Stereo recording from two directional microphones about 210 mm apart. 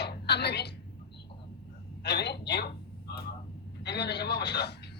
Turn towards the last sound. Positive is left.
turn(degrees=55)  # may be behind; listen again after turning